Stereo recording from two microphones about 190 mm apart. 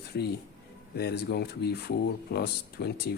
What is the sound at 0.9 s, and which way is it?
Speech, 60° left (ahead or behind).